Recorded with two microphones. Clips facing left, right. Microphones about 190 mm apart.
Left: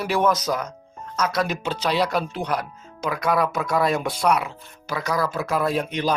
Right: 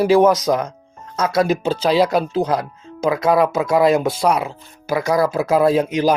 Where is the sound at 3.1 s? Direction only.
25° right (ahead or behind).